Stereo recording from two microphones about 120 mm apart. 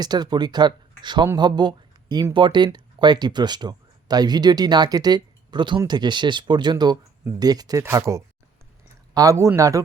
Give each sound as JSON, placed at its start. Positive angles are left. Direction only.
{"t": 0.0, "sound": "speech", "side_deg": -35}